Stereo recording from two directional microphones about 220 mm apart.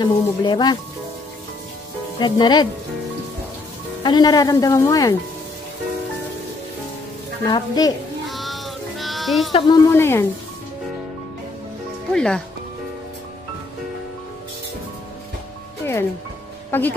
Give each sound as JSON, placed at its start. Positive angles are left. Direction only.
{"t": 0.0, "sound": "speech", "side_deg": 20}
{"t": 2.1, "sound": "speech", "side_deg": 20}
{"t": 4.0, "sound": "speech", "side_deg": 20}
{"t": 7.4, "sound": "speech", "side_deg": 20}
{"t": 8.3, "sound": "child singing", "side_deg": 0}
{"t": 9.7, "sound": "speech", "side_deg": 10}
{"t": 12.1, "sound": "speech", "side_deg": 5}
{"t": 15.8, "sound": "music", "side_deg": 10}